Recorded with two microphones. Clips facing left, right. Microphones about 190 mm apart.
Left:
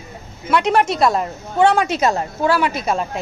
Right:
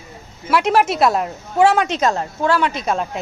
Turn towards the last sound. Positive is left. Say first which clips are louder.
# even
turn(degrees=0)  # may be behind; listen again after turning